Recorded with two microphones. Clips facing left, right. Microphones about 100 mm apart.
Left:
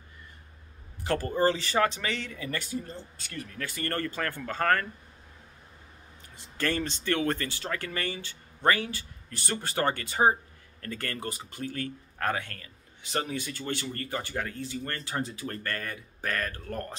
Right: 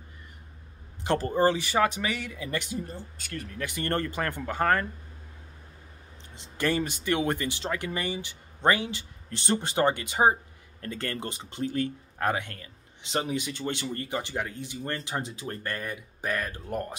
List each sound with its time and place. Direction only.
1.0 s speech: 20° right (ahead or behind)
6.3 s speech: 20° right (ahead or behind)